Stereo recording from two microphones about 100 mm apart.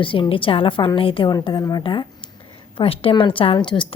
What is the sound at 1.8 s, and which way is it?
Speech, 55° left (ahead or behind).